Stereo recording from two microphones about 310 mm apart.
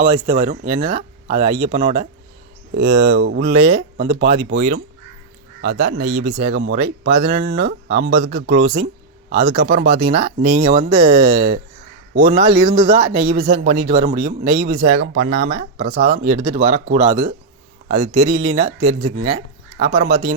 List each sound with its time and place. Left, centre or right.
0.0 s a man's voice: centre
2.8 s speech: right
3.1 s a man's voice: right